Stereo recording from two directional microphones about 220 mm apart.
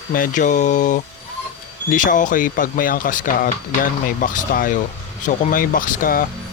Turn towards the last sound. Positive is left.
turn(degrees=40)  # may be behind; listen again after turning